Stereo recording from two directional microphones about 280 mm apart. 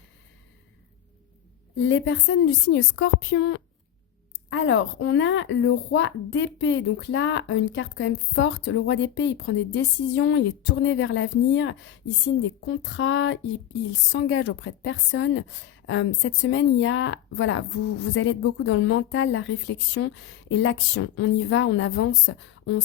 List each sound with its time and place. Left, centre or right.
1.7 s a woman's voice: left